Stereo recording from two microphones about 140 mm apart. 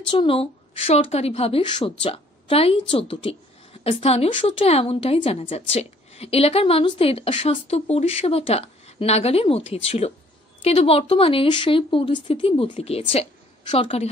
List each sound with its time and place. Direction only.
0.1 s a woman's voice: 40° left (ahead or behind)